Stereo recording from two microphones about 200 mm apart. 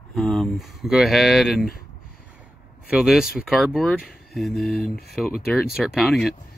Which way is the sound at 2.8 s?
5° right (ahead or behind).